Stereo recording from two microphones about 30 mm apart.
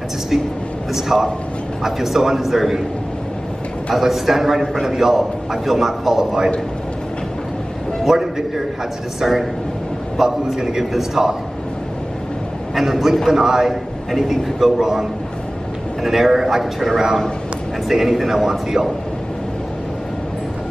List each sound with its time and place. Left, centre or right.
0.9 s a man's voice: centre
3.9 s a man's voice: centre
8.0 s a man's voice: centre
12.7 s a man's voice: centre
13.3 s a man's voice: centre